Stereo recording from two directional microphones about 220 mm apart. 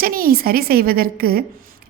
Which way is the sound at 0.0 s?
40° right (ahead or behind).